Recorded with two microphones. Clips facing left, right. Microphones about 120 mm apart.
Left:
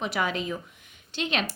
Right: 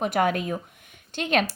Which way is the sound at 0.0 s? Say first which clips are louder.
Right 5 dB; 50° right (ahead or behind).